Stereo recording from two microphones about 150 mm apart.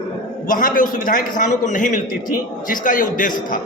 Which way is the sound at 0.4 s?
65° left (ahead or behind).